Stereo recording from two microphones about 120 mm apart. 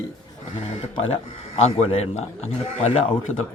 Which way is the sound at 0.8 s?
60° left (ahead or behind).